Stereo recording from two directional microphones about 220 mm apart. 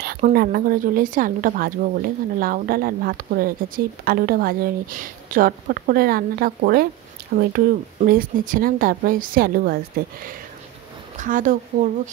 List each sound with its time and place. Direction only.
0.3 s speech: 45° right (ahead or behind)